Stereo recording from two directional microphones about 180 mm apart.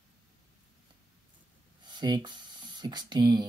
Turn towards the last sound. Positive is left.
turn(degrees=-25)  # may be behind; listen again after turning